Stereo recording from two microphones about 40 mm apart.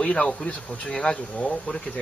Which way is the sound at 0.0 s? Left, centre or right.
Left.